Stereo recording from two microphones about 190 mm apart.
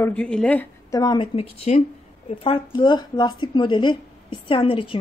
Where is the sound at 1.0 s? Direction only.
25° left (ahead or behind).